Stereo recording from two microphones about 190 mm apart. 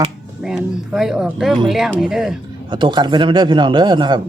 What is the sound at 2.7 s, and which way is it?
A man's voice, 25° right (ahead or behind).